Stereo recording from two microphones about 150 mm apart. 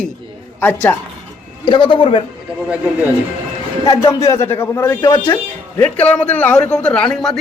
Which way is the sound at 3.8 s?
20° left (ahead or behind).